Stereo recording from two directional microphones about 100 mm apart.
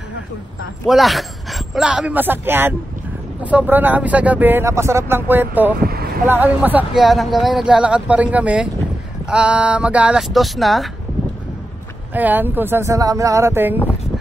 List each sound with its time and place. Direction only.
0.8 s speech: centre (ahead or behind)
1.9 s speech: 10° right (ahead or behind)
6.9 s speech: centre (ahead or behind)
10.2 s speech: centre (ahead or behind)
12.1 s speech: 20° right (ahead or behind)